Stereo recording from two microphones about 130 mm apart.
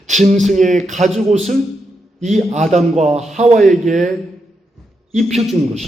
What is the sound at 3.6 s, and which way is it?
Speech, centre (ahead or behind).